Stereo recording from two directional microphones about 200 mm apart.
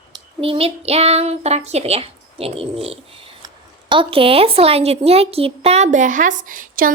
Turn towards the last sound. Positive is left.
turn(degrees=-45)  # may be behind; listen again after turning